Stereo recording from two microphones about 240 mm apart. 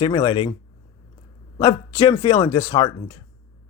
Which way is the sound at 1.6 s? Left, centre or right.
Centre.